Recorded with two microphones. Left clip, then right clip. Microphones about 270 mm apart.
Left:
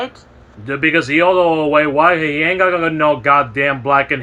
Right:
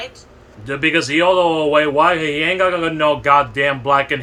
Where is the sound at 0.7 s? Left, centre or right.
Right.